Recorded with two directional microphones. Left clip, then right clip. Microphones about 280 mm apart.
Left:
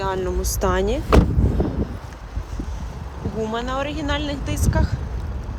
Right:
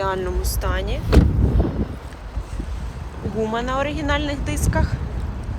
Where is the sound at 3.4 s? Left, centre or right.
Centre.